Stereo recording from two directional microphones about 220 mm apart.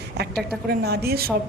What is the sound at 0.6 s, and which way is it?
Speech, 45° right (ahead or behind).